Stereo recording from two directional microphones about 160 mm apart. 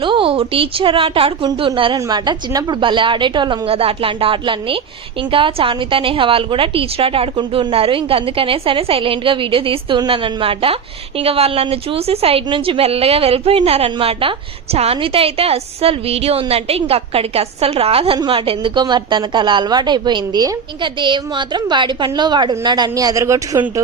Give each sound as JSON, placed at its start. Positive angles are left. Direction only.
{"t": 0.0, "sound": "a woman's voice", "side_deg": -30}